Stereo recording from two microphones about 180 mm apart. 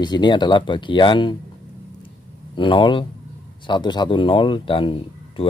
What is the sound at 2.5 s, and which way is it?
Speech, 25° left (ahead or behind).